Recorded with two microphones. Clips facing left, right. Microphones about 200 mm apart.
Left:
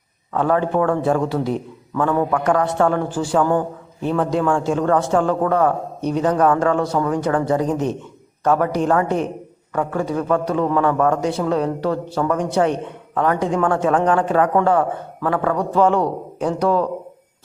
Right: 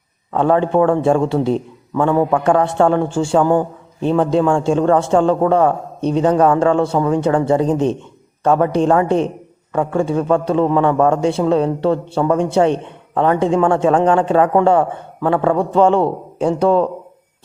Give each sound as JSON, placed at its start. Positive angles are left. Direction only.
{"t": 0.3, "sound": "a man's voice", "side_deg": -25}